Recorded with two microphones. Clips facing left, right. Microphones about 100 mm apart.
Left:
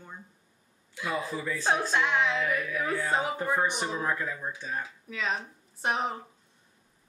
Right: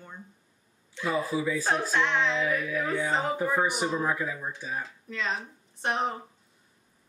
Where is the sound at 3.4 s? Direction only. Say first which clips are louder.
Right 2 dB; 5° right (ahead or behind).